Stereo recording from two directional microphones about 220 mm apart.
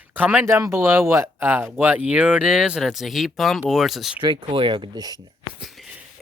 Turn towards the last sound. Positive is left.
turn(degrees=0)  # may be behind; listen again after turning